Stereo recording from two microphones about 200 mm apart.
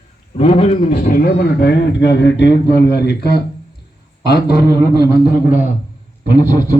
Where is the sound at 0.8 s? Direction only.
45° left (ahead or behind).